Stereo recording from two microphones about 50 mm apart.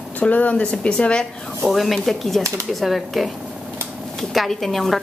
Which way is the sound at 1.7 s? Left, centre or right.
Centre.